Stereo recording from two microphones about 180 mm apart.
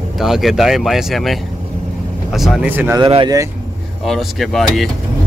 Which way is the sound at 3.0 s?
30° right (ahead or behind).